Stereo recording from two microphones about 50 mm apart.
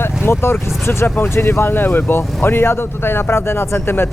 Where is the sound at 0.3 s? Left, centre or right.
Left.